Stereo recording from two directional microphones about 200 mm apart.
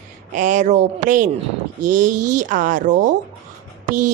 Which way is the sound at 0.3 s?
40° right (ahead or behind).